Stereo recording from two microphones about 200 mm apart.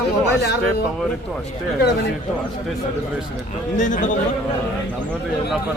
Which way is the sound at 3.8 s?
40° left (ahead or behind).